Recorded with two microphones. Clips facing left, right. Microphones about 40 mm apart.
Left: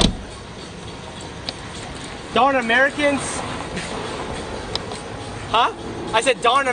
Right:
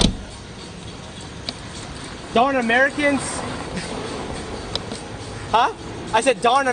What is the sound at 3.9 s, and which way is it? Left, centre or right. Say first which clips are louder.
Speech: left 1 dB; left.